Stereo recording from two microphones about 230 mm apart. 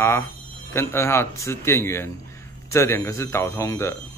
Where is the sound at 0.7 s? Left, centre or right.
Centre.